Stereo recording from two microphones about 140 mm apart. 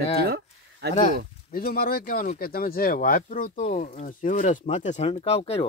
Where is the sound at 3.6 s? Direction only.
55° left (ahead or behind).